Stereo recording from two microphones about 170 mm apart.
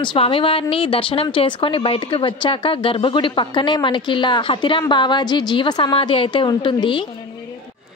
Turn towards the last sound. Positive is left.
turn(degrees=25)  # may be behind; listen again after turning